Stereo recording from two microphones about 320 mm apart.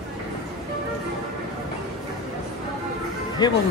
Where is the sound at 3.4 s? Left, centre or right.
Centre.